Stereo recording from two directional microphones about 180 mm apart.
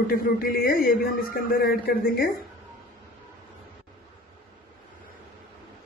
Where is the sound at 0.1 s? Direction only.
55° left (ahead or behind).